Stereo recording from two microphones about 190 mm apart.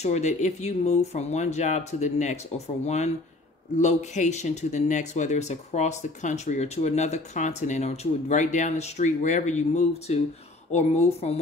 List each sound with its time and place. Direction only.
0.0 s speech: 35° left (ahead or behind)